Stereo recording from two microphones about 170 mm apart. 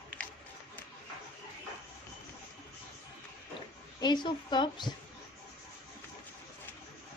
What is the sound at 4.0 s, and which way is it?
Speech, 25° left (ahead or behind).